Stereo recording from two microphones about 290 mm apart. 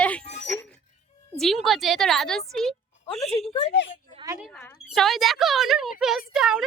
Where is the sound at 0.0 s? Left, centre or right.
Centre.